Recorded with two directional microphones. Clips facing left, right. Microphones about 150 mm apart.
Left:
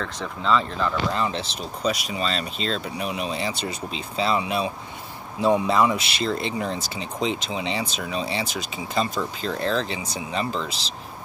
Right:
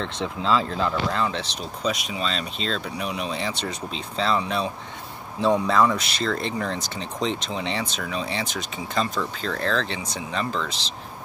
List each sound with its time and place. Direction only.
0.0 s speech: 30° right (ahead or behind)
1.1 s speech: 5° left (ahead or behind)